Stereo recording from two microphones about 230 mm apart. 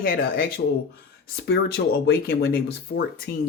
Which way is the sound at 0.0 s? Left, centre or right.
Left.